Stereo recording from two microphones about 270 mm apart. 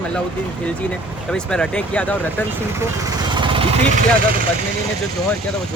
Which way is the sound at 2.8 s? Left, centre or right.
Centre.